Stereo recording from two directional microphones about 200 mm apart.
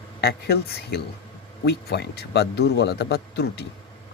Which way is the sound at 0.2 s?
50° left (ahead or behind).